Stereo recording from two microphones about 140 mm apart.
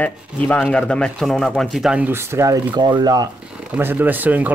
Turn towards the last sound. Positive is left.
turn(degrees=-10)  # may be behind; listen again after turning